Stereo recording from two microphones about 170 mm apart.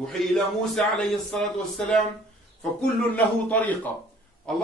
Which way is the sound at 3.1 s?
10° left (ahead or behind).